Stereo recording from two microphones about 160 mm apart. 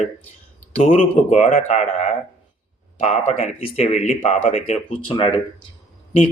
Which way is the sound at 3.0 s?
45° left (ahead or behind).